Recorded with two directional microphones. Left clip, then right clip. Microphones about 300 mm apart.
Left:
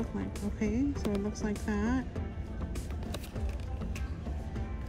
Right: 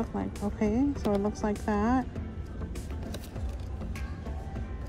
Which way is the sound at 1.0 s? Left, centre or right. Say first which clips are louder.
Right 6 dB; centre.